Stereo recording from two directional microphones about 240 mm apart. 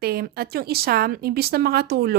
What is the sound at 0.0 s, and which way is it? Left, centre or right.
Speech, right.